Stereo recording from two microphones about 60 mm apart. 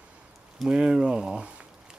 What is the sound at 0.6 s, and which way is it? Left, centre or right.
Speech, centre.